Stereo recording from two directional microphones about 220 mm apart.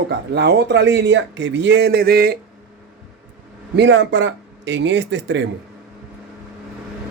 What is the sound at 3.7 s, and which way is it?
Speech, 55° right (ahead or behind).